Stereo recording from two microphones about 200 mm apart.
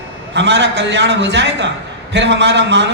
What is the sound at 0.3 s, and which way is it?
A man's voice, 60° right (ahead or behind).